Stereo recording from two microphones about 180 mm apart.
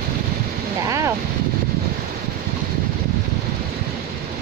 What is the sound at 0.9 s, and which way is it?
Speech, 15° right (ahead or behind).